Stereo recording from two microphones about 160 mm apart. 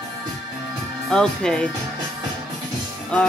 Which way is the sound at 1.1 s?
5° left (ahead or behind).